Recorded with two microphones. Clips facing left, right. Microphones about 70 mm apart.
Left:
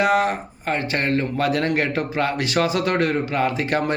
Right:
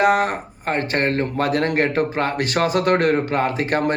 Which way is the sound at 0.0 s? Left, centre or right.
Right.